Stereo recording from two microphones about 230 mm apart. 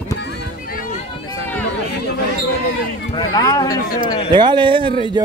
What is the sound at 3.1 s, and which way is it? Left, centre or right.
Speech, centre.